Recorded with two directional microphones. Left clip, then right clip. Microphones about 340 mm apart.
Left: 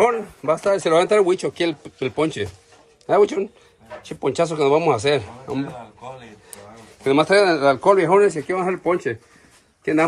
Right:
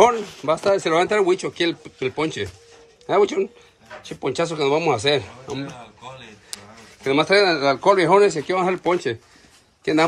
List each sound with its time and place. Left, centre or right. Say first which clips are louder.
0.0 s speech: right 2 dB; centre
5.6 s a sound: left 4 dB; centre
7.0 s speech: left 1 dB; centre